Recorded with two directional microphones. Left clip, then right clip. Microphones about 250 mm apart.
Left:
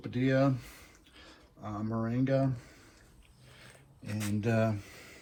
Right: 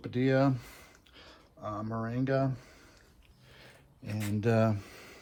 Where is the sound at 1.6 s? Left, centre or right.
Centre.